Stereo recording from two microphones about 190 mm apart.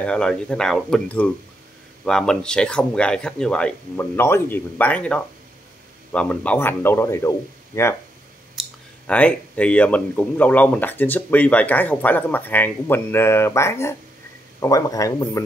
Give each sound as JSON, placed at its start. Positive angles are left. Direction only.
{"t": 0.0, "sound": "speech", "side_deg": 5}